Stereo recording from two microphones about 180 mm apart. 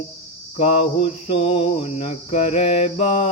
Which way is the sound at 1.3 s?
30° left (ahead or behind).